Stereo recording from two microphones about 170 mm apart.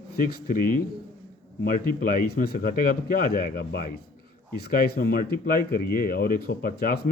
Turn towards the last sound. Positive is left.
turn(degrees=60)  # may be behind; listen again after turning